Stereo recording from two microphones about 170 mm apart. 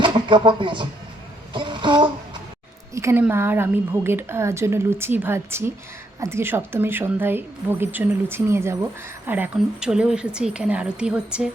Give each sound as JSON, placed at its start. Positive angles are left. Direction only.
{"t": 0.0, "sound": "speech", "side_deg": -25}
{"t": 1.5, "sound": "a sound", "side_deg": -30}
{"t": 2.9, "sound": "a woman's voice", "side_deg": -15}